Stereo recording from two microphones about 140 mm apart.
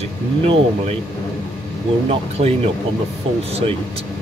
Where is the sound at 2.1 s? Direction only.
45° right (ahead or behind).